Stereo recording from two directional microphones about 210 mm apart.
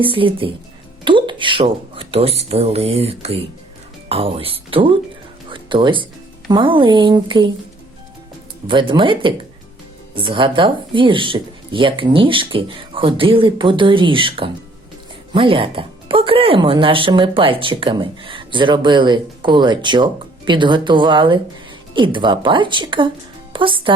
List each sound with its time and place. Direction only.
0.0 s speech: 25° right (ahead or behind)
5.5 s music: 25° right (ahead or behind)
6.5 s speech: 25° right (ahead or behind)
8.6 s speech: 25° right (ahead or behind)